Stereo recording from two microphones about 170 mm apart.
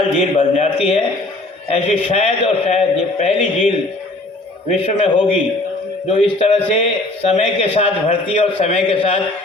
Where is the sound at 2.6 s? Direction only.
40° left (ahead or behind).